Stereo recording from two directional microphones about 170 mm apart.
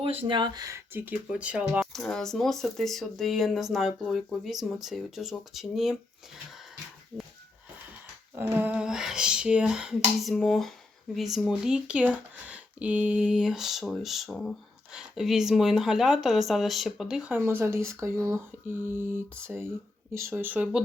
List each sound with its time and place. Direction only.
0.0 s speech: 30° right (ahead or behind); by 6.0 s centre (ahead or behind)
8.4 s speech: 10° right (ahead or behind)